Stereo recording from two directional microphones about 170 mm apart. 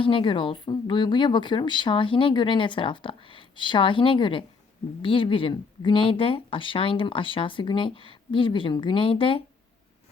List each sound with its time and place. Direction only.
0.0 s a woman's voice: 30° left (ahead or behind)